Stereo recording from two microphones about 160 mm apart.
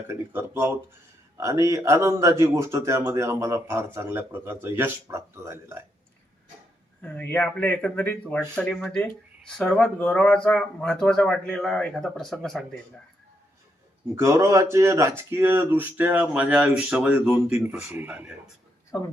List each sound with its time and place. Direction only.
0.1 s speech: 15° right (ahead or behind)
7.0 s speech: 10° left (ahead or behind)
14.2 s speech: 15° right (ahead or behind)